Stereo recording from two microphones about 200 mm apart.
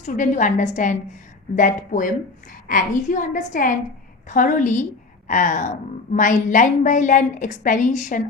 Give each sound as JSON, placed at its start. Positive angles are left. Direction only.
{"t": 0.0, "sound": "a woman's voice", "side_deg": 40}